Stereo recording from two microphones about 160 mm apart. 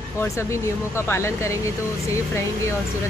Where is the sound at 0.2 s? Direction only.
15° left (ahead or behind).